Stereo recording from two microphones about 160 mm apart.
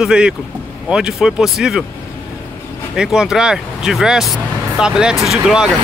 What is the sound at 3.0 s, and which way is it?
Speech, 5° right (ahead or behind).